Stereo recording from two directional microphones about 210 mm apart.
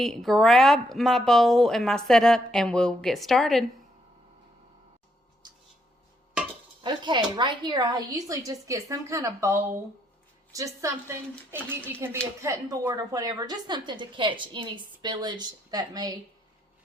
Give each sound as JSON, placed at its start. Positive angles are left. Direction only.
{"t": 0.0, "sound": "speech", "side_deg": 0}
{"t": 6.8, "sound": "a woman's voice", "side_deg": -20}